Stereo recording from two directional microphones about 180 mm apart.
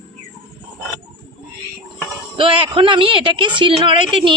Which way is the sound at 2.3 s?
30° right (ahead or behind).